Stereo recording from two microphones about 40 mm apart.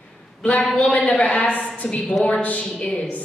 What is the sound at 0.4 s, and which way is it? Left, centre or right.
Speech, left.